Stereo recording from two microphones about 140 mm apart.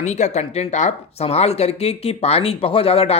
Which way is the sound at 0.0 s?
55° left (ahead or behind).